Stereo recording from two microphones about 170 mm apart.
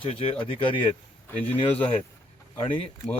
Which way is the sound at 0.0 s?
30° left (ahead or behind).